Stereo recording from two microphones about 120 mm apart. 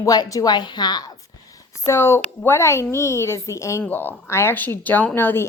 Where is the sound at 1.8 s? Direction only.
20° left (ahead or behind).